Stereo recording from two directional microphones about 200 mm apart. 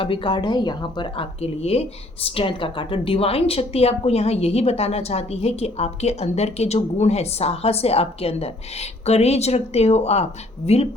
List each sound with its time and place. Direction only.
0.0 s speech: 25° left (ahead or behind)